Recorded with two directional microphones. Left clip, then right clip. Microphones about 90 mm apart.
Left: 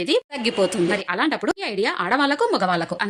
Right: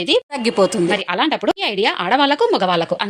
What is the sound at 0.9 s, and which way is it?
Speech, 20° right (ahead or behind).